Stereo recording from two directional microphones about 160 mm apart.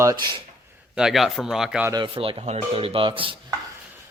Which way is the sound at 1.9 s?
30° right (ahead or behind).